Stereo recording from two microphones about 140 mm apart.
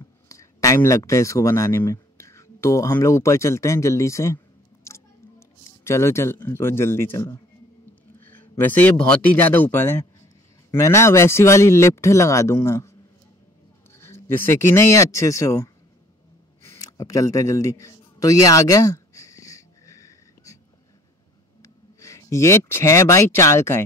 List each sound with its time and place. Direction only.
0.0 s speech: 25° left (ahead or behind)
5.9 s a man's voice: 20° left (ahead or behind)
13.9 s speech: 20° left (ahead or behind)
16.6 s a sound: 25° left (ahead or behind)
22.0 s a man's voice: 20° left (ahead or behind)